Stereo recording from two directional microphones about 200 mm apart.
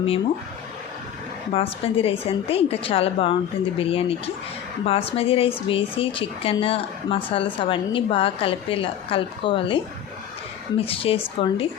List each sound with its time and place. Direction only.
1.5 s a woman's voice: 30° left (ahead or behind)